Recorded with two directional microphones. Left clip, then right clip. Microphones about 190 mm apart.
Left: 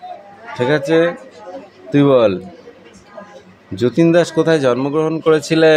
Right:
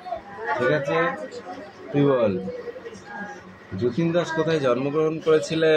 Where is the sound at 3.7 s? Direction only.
60° left (ahead or behind).